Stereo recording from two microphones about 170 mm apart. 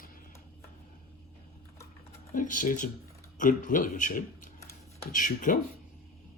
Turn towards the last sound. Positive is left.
turn(degrees=50)  # may be behind; listen again after turning